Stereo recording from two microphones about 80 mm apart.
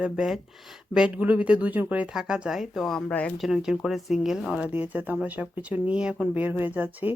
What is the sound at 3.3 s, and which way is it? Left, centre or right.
Speech, centre.